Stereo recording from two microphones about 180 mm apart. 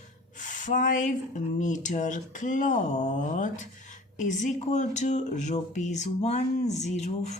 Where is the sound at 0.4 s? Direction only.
45° left (ahead or behind).